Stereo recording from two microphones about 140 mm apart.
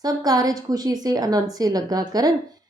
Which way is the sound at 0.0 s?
25° right (ahead or behind).